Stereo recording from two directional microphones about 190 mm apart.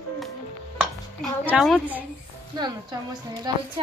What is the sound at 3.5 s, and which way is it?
Speech, 20° right (ahead or behind).